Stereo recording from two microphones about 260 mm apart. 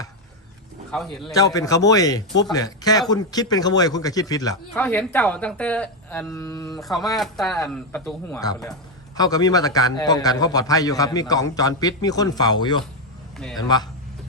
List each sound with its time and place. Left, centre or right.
0.9 s a man's voice: centre
1.3 s a man's voice: centre
6.8 s a man's voice: centre